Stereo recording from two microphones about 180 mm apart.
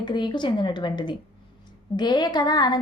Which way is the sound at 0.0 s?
25° left (ahead or behind).